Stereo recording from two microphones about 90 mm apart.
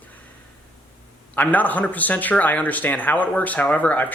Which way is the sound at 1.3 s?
20° left (ahead or behind).